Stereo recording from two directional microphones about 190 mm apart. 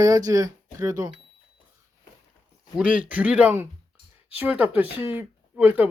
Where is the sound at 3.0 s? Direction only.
10° right (ahead or behind).